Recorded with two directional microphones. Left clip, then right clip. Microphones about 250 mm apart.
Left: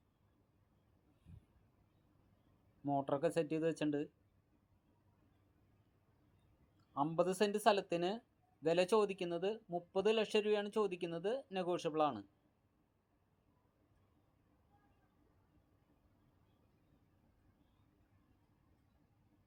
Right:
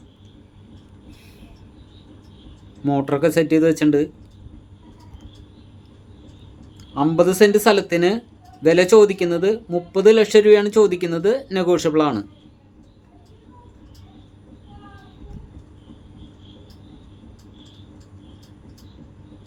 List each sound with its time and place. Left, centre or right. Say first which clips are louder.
2.8 s speech: right 18 dB; centre
6.9 s speech: right 19 dB; centre